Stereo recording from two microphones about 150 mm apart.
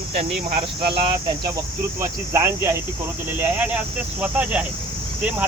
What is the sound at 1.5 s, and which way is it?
Speech, 20° right (ahead or behind).